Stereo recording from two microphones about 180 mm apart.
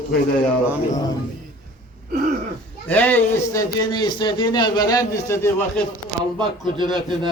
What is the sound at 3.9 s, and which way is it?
A man's voice, 25° left (ahead or behind).